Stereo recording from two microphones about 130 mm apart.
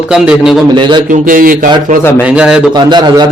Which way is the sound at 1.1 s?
90° right.